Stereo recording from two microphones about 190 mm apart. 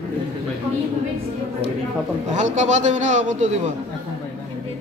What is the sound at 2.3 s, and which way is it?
A man's voice, 40° right (ahead or behind).